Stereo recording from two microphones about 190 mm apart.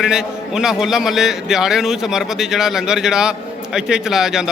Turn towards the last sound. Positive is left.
turn(degrees=-5)  # may be behind; listen again after turning